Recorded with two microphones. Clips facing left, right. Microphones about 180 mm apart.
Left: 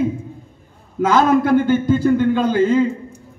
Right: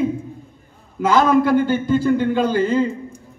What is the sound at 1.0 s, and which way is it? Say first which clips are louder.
A man's voice: left 1 dB; 55° left (ahead or behind).